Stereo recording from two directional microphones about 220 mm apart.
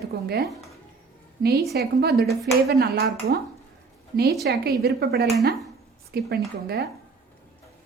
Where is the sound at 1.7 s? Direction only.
45° right (ahead or behind).